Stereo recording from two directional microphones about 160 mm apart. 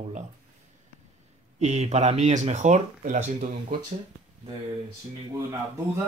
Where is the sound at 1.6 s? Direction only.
45° right (ahead or behind).